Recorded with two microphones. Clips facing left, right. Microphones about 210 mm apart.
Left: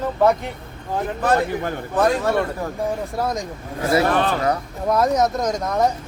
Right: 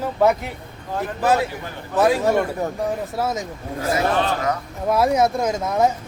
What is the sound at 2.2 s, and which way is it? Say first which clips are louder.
Speech: right 2 dB; 15° right (ahead or behind).